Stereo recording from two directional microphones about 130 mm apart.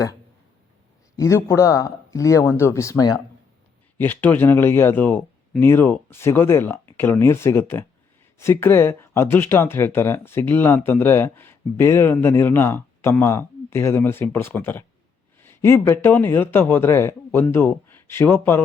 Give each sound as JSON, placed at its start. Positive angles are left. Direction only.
{"t": 1.1, "sound": "speech", "side_deg": 25}
{"t": 3.9, "sound": "speech", "side_deg": 15}